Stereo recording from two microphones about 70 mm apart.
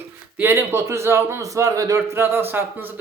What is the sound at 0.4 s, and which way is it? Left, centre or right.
A man's voice, right.